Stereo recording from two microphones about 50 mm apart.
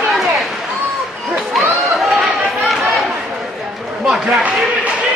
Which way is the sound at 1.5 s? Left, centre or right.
Centre.